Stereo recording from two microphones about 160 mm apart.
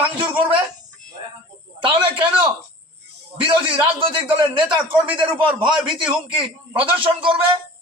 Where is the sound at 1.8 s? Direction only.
30° right (ahead or behind).